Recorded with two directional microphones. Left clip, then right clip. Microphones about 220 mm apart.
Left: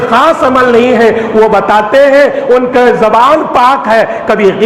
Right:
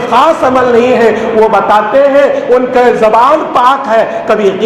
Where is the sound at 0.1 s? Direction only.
35° left (ahead or behind).